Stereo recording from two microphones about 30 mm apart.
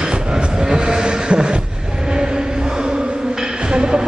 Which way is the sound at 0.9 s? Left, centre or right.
Right.